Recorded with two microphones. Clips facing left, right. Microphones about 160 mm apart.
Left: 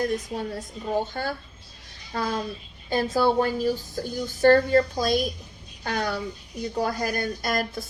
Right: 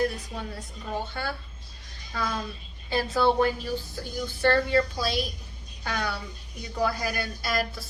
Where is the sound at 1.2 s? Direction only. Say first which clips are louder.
Left 3 dB; 40° left (ahead or behind).